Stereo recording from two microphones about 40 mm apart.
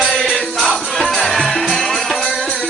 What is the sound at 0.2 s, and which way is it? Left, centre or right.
Music, centre.